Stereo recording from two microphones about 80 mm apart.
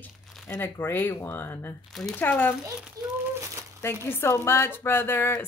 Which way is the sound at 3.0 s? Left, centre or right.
Right.